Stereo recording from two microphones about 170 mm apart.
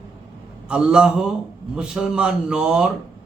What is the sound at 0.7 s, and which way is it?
A man's voice, 5° right (ahead or behind).